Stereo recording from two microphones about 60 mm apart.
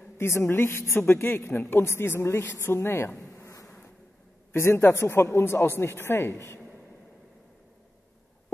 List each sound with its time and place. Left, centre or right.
0.2 s a woman's voice: left
4.5 s speech: left